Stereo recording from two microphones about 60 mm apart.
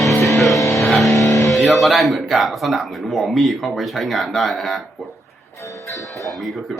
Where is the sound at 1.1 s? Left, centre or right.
Left.